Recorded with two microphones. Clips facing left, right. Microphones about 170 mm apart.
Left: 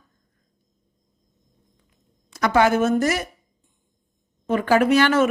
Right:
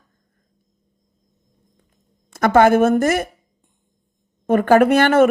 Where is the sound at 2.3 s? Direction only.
50° right (ahead or behind).